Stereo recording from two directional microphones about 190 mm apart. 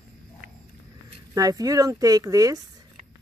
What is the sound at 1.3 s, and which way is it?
Speech, 20° right (ahead or behind).